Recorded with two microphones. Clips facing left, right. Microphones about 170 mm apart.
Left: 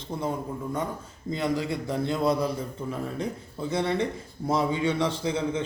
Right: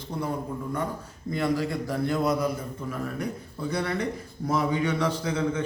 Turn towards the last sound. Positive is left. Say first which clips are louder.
# even
turn(degrees=25)  # may be behind; listen again after turning